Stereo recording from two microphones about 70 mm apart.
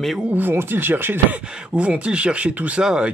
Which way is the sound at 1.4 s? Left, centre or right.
Centre.